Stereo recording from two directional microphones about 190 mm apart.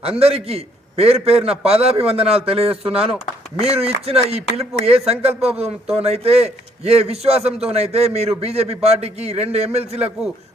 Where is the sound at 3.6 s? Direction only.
30° right (ahead or behind).